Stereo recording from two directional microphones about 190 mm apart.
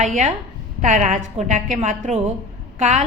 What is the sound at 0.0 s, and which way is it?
A woman's voice, 40° right (ahead or behind).